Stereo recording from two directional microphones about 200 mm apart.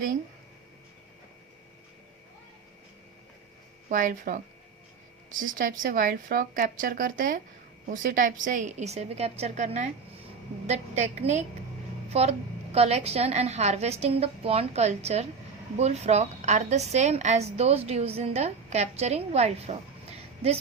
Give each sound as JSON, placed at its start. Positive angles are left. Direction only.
{"t": 3.8, "sound": "a woman's voice", "side_deg": -40}